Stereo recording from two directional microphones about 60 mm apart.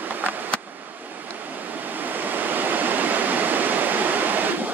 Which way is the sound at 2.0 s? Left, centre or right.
Right.